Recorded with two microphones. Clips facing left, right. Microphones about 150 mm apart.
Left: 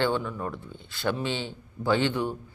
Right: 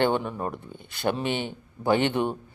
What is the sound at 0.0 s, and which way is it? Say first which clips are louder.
Speech: right 3 dB; 20° right (ahead or behind).